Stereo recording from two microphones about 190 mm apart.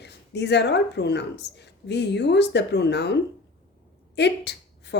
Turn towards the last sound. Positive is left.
turn(degrees=65)  # may be behind; listen again after turning